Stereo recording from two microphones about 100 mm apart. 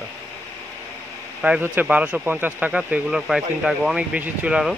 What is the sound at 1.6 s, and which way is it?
Speech, 15° right (ahead or behind).